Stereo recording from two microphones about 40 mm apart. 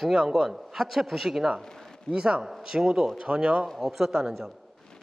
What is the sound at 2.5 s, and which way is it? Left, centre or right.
Speech, centre.